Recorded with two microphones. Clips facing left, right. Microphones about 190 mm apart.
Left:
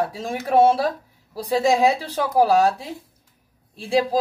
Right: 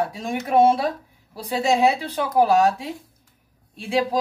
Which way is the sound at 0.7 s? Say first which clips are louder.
Left 1 dB; 35° left (ahead or behind).